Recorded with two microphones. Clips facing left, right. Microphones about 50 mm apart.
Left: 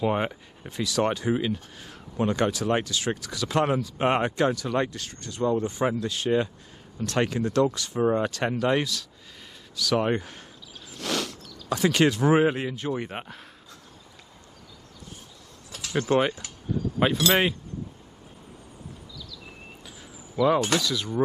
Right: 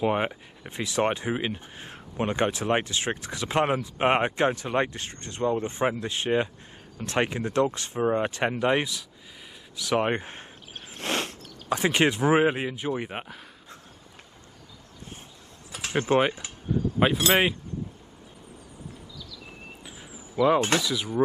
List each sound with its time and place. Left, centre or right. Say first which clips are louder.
0.0 s speech: even; centre
0.7 s speech: even; right
10.7 s a sound: even; right
11.7 s speech: left 1 dB; right; by 13.5 s centre
15.7 s a sound: even; right
16.2 s speech: right 1 dB; right
20.3 s speech: even; centre